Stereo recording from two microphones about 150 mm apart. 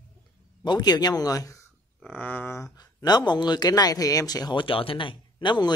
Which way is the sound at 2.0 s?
10° left (ahead or behind).